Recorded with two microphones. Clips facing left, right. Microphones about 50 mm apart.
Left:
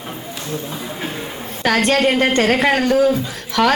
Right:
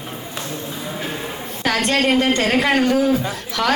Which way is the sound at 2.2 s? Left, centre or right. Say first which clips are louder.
Left 2 dB; left.